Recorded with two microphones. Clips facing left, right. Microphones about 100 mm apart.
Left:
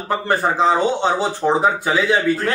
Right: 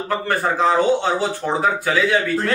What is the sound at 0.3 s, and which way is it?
Speech, 20° left (ahead or behind).